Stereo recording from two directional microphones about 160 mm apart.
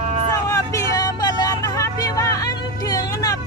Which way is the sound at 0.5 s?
20° left (ahead or behind).